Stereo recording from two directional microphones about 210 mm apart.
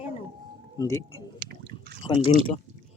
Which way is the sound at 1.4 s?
50° right (ahead or behind).